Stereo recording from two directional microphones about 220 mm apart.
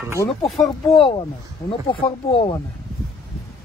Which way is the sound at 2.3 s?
25° left (ahead or behind).